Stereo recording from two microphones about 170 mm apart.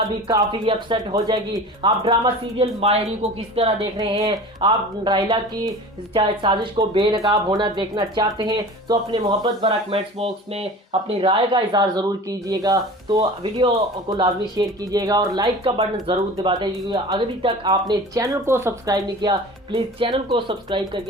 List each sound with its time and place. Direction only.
0.3 s speech: 25° right (ahead or behind)